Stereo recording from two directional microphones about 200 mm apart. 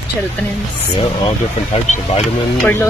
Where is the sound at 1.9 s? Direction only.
35° left (ahead or behind).